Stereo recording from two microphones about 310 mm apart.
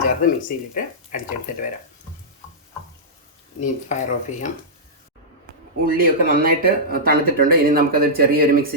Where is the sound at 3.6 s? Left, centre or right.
Left.